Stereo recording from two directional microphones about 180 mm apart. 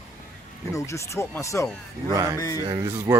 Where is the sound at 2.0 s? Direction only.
20° right (ahead or behind).